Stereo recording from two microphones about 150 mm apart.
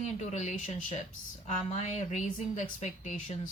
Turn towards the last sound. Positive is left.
turn(degrees=50)  # may be behind; listen again after turning